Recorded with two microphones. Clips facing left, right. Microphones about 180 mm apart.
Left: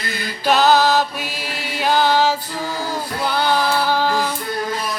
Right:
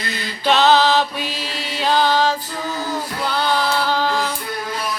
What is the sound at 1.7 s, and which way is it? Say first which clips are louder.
Music: left 1 dB; 10° left (ahead or behind).